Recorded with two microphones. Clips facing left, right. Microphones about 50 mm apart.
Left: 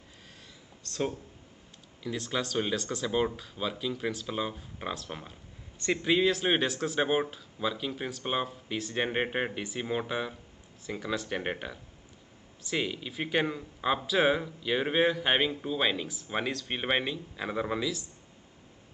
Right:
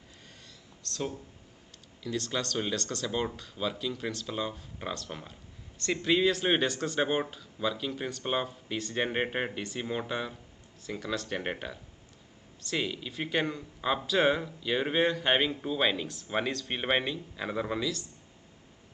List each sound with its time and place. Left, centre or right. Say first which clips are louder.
2.0 s speech: even; centre
6.1 s speech: right 1 dB; centre